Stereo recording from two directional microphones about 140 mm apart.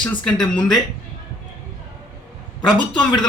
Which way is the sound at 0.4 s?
30° left (ahead or behind).